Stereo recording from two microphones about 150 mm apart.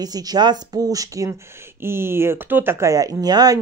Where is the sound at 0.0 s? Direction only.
25° right (ahead or behind).